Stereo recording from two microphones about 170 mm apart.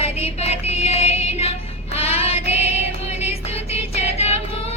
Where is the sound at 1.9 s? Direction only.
35° left (ahead or behind).